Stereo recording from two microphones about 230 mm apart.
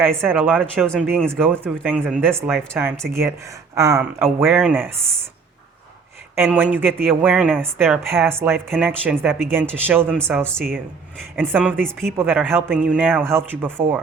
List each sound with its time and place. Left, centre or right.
0.3 s speech: centre
1.5 s a man's voice: centre
6.3 s a man's voice: centre
12.1 s a man's voice: centre